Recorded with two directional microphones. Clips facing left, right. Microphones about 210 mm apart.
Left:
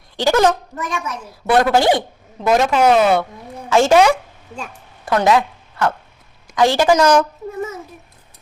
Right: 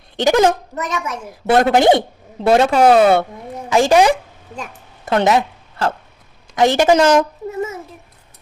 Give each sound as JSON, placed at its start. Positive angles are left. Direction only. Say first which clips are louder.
{"t": 0.2, "sound": "a woman's voice", "louder": "right 1 dB", "side_deg": -20}
{"t": 3.7, "sound": "a woman's voice", "louder": "even", "side_deg": -15}